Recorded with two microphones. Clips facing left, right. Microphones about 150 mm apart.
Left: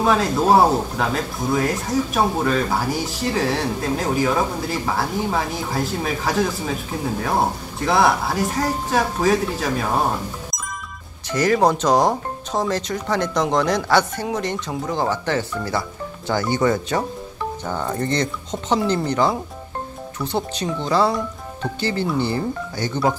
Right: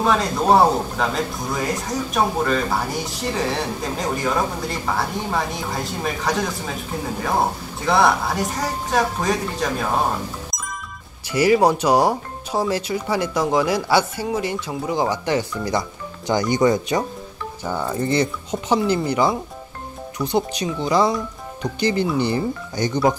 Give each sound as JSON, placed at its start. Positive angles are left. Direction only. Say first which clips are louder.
{"t": 0.0, "sound": "speech", "louder": "left 1 dB", "side_deg": 0}
{"t": 7.8, "sound": "speech", "louder": "even", "side_deg": 0}
{"t": 11.2, "sound": "speech", "louder": "right 1 dB", "side_deg": -10}